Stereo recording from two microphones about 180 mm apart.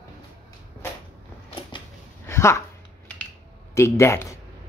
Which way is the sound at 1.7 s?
25° left (ahead or behind).